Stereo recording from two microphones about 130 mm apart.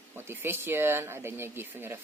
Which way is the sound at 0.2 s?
20° right (ahead or behind).